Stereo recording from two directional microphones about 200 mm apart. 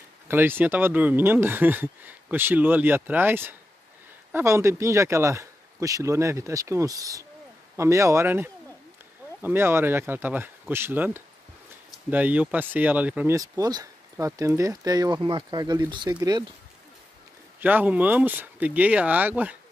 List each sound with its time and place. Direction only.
0.3 s speech: 10° right (ahead or behind)
13.4 s speech: 20° right (ahead or behind)
17.6 s speech: 10° right (ahead or behind)